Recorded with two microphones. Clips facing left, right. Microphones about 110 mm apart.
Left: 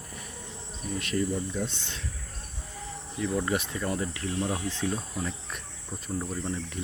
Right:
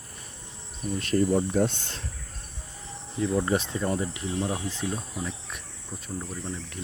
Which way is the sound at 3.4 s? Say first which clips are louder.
Right 3 dB; 30° right (ahead or behind).